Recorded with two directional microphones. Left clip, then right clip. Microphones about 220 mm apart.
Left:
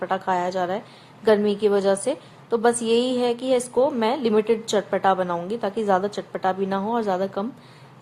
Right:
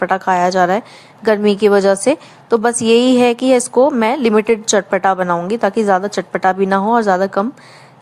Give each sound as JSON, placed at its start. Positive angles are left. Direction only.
{"t": 0.0, "sound": "a woman's voice", "side_deg": -30}